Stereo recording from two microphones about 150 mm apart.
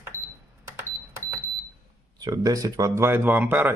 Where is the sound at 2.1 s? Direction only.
25° right (ahead or behind).